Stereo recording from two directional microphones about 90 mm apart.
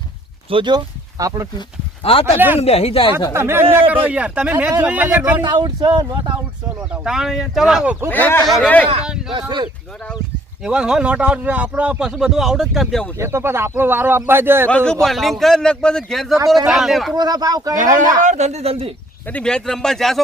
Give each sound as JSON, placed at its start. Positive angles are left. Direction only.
{"t": 0.5, "sound": "speech", "side_deg": -60}
{"t": 1.2, "sound": "speech", "side_deg": -40}
{"t": 2.0, "sound": "speech", "side_deg": 90}
{"t": 3.3, "sound": "speech", "side_deg": -30}
{"t": 5.4, "sound": "speech", "side_deg": -55}
{"t": 6.9, "sound": "speech", "side_deg": -10}
{"t": 8.1, "sound": "speech", "side_deg": 20}
{"t": 10.6, "sound": "speech", "side_deg": -10}
{"t": 13.1, "sound": "speech", "side_deg": -30}
{"t": 14.7, "sound": "speech", "side_deg": 15}
{"t": 15.0, "sound": "speech", "side_deg": 0}
{"t": 17.2, "sound": "speech", "side_deg": -50}
{"t": 18.6, "sound": "speech", "side_deg": -90}
{"t": 19.3, "sound": "speech", "side_deg": 10}